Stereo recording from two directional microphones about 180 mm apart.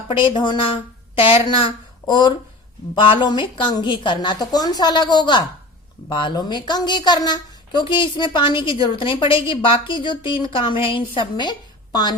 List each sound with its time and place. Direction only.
0.1 s a woman's voice: 25° left (ahead or behind)